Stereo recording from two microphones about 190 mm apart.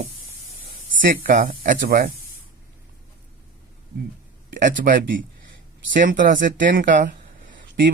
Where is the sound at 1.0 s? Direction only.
45° right (ahead or behind).